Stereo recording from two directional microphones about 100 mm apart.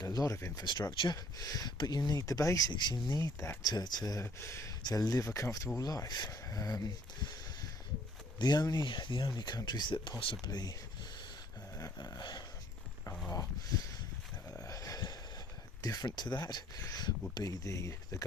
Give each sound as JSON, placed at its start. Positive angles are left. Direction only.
{"t": 0.0, "sound": "speech", "side_deg": 35}
{"t": 0.6, "sound": "speech", "side_deg": 45}
{"t": 4.9, "sound": "speech", "side_deg": 40}
{"t": 10.4, "sound": "speech", "side_deg": 40}
{"t": 11.8, "sound": "dog", "side_deg": 40}
{"t": 13.3, "sound": "speech", "side_deg": 35}
{"t": 14.6, "sound": "a sound", "side_deg": 35}
{"t": 15.8, "sound": "speech", "side_deg": 40}